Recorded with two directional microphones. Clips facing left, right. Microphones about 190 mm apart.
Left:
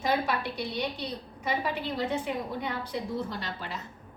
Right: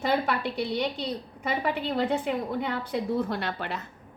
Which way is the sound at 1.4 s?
55° right (ahead or behind).